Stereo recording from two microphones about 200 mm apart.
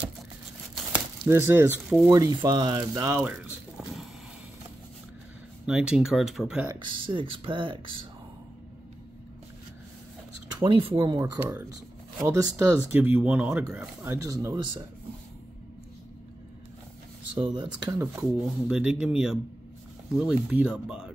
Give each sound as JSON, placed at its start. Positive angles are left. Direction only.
{"t": 0.7, "sound": "a sound", "side_deg": -5}
{"t": 2.1, "sound": "speech", "side_deg": -20}
{"t": 3.7, "sound": "a sound", "side_deg": 0}
{"t": 5.7, "sound": "speech", "side_deg": -5}
{"t": 6.7, "sound": "speech", "side_deg": -25}
{"t": 10.6, "sound": "speech", "side_deg": -25}
{"t": 17.4, "sound": "speech", "side_deg": -20}
{"t": 18.7, "sound": "speech", "side_deg": -5}